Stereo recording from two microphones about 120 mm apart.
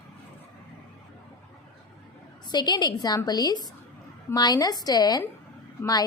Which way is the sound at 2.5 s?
35° left (ahead or behind).